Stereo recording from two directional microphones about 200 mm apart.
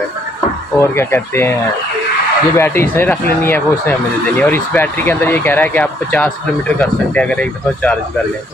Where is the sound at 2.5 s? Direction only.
10° left (ahead or behind).